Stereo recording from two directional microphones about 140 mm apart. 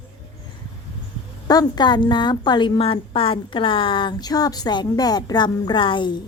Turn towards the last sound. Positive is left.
turn(degrees=35)  # may be behind; listen again after turning